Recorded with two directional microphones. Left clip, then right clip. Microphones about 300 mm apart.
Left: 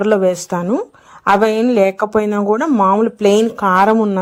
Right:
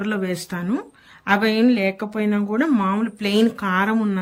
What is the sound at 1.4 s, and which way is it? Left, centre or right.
Speech, centre.